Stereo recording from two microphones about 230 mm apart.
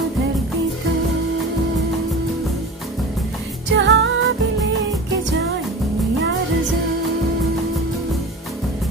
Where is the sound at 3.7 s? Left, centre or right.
Right.